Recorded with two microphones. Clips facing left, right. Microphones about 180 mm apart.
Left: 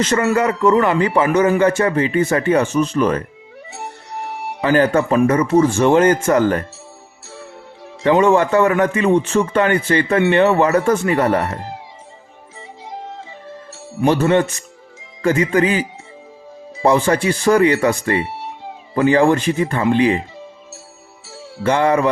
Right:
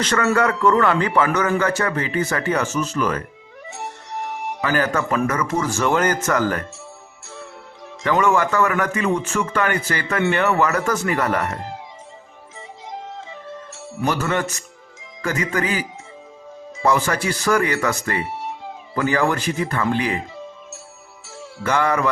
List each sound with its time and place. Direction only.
0.0 s a man's voice: 25° left (ahead or behind)
8.0 s speech: 25° left (ahead or behind)
14.0 s speech: 25° left (ahead or behind)
21.2 s music: 25° left (ahead or behind)